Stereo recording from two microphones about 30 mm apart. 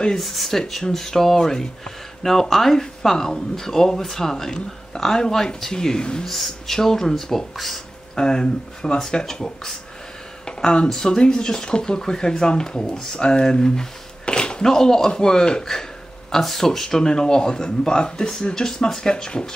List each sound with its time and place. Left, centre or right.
0.2 s speech: centre
6.2 s speech: centre
6.8 s speech: centre
7.5 s speech: centre
8.2 s speech: left
10.4 s a sound: left
10.9 s speech: centre
11.1 s speech: left
14.2 s a sound: left
14.6 s speech: centre
16.3 s speech: centre